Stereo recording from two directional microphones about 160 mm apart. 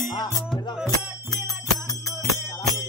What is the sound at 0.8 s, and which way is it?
Music, 20° left (ahead or behind).